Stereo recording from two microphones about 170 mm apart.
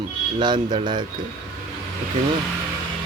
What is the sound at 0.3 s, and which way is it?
Speech, 25° right (ahead or behind).